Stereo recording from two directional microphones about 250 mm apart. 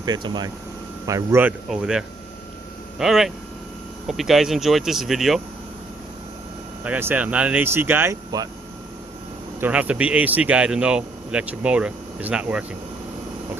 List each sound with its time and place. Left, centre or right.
0.0 s speech: centre
6.8 s speech: centre
9.6 s speech: centre